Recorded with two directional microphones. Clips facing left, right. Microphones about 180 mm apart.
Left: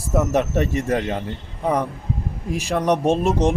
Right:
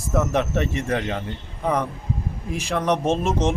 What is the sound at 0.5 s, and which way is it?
Speech, 40° left (ahead or behind).